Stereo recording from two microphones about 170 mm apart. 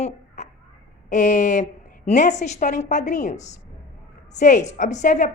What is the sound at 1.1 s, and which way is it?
A woman's voice, 45° left (ahead or behind).